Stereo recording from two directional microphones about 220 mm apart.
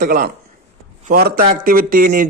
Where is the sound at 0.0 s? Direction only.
40° right (ahead or behind).